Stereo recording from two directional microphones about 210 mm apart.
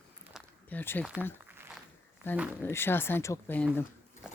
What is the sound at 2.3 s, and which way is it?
Speech, 10° left (ahead or behind).